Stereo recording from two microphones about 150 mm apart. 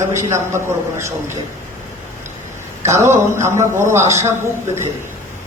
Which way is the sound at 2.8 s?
20° right (ahead or behind).